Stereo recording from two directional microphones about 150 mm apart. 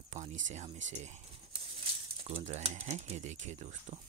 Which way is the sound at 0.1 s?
55° right (ahead or behind).